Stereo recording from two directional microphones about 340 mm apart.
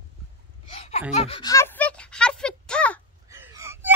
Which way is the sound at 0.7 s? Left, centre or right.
Centre.